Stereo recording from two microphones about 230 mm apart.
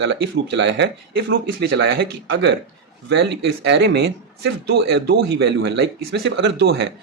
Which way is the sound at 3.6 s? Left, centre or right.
Right.